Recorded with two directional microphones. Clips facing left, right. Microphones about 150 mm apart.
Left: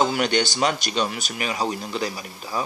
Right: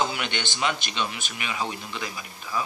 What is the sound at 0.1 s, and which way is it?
Speech, 40° left (ahead or behind).